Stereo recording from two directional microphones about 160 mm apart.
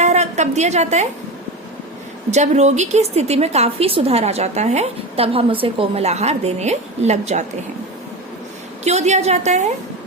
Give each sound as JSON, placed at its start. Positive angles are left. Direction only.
{"t": 0.0, "sound": "a woman's voice", "side_deg": -45}
{"t": 2.3, "sound": "a woman's voice", "side_deg": -45}
{"t": 8.8, "sound": "a woman's voice", "side_deg": -45}